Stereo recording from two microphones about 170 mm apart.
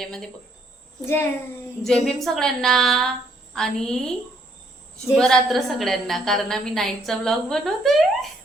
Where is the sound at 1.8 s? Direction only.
Centre (ahead or behind).